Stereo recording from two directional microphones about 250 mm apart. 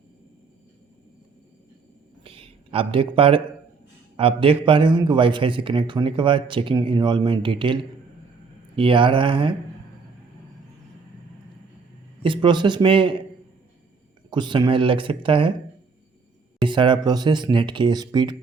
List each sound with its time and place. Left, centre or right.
2.2 s a sound: right
4.2 s a man's voice: right
12.2 s a man's voice: centre
14.3 s a man's voice: centre
16.6 s speech: centre